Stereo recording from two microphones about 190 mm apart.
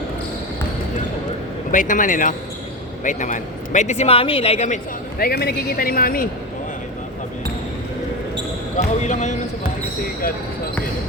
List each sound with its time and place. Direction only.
1.7 s a man's voice: 45° left (ahead or behind)
5.2 s speech: 55° left (ahead or behind)
9.0 s a man's voice: 40° left (ahead or behind)